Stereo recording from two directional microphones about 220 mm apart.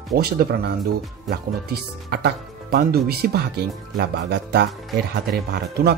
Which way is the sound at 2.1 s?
45° right (ahead or behind).